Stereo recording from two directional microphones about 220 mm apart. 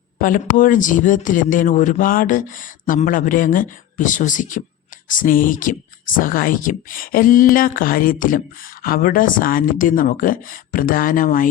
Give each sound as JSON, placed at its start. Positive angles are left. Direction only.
{"t": 0.2, "sound": "speech", "side_deg": 40}